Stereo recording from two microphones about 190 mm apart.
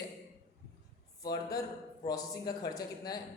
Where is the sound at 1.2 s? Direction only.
20° left (ahead or behind).